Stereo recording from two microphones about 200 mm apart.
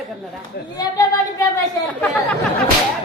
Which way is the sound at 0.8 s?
15° left (ahead or behind).